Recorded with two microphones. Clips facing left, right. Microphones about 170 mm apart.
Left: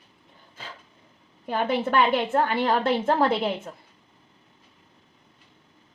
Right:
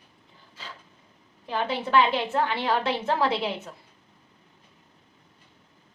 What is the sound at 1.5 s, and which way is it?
A woman's voice, 50° left (ahead or behind).